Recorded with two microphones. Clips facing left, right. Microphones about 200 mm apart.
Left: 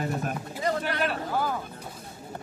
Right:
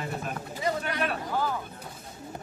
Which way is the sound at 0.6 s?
5° right (ahead or behind).